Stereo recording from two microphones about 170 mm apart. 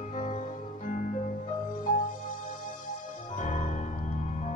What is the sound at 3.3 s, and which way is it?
Music, 45° left (ahead or behind).